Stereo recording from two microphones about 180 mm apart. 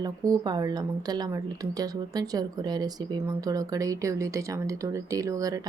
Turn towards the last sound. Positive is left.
turn(degrees=-20)  # may be behind; listen again after turning